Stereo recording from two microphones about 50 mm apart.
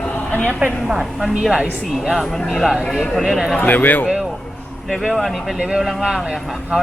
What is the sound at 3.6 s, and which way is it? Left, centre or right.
Speech, left.